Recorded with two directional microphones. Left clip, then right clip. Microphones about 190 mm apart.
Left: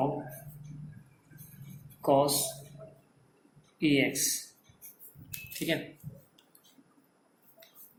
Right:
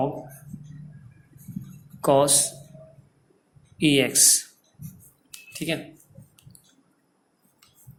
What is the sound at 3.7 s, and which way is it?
Speech, 55° right (ahead or behind).